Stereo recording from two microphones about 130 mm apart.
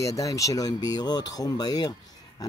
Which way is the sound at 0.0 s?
25° left (ahead or behind).